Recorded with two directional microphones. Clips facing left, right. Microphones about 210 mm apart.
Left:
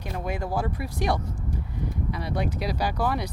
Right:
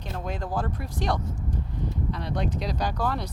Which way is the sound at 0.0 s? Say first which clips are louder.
Left 2 dB; 10° left (ahead or behind).